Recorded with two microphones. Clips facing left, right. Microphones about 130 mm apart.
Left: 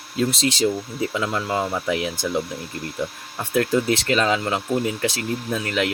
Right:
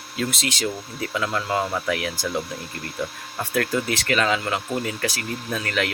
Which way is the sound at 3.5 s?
20° left (ahead or behind).